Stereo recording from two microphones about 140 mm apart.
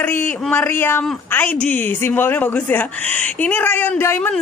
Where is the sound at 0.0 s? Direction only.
15° left (ahead or behind).